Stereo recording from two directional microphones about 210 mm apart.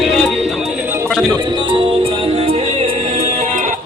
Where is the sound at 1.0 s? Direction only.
5° left (ahead or behind).